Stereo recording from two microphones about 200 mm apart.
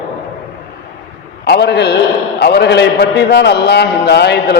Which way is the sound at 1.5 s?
55° left (ahead or behind).